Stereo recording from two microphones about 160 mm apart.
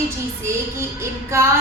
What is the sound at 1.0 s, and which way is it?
Speech, 15° right (ahead or behind).